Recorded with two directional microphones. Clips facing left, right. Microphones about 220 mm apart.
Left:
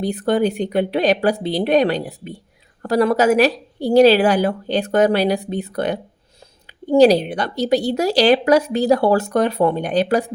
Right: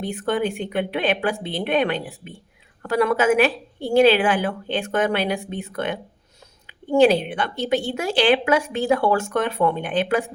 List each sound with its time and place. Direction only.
0.0 s speech: 35° left (ahead or behind)